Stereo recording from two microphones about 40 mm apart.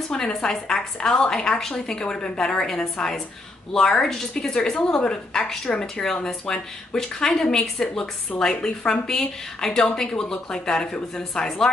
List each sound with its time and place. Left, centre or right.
0.1 s speech: centre